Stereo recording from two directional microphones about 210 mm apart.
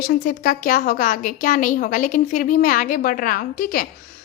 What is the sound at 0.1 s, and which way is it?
A woman's voice, 40° left (ahead or behind).